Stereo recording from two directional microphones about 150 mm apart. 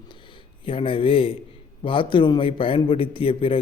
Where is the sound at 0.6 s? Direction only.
35° left (ahead or behind).